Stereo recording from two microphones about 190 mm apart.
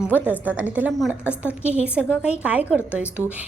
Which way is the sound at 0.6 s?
5° right (ahead or behind).